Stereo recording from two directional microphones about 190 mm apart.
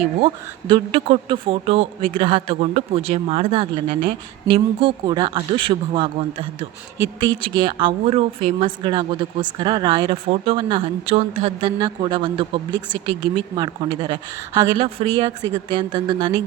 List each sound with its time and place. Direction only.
0.7 s speech: 30° right (ahead or behind)